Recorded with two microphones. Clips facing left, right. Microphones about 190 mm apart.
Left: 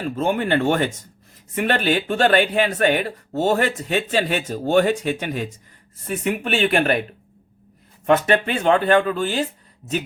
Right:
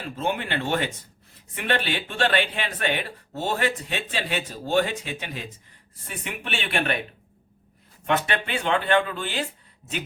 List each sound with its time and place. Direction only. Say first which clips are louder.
0.2 s speech: left 7 dB; 45° left (ahead or behind)
8.0 s speech: left 8 dB; 40° left (ahead or behind)